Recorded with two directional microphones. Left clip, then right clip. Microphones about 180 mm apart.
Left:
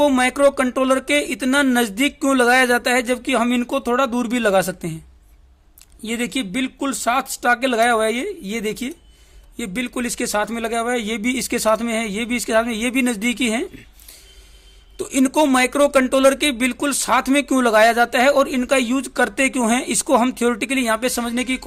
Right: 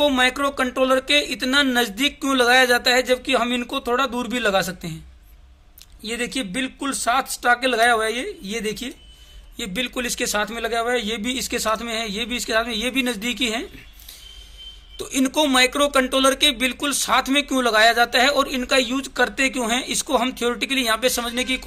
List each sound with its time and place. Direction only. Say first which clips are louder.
0.0 s speech: left 3 dB; 55° left (ahead or behind)
6.1 s speech: left 2 dB; 60° left (ahead or behind)
14.9 s speech: left 3 dB; 60° left (ahead or behind)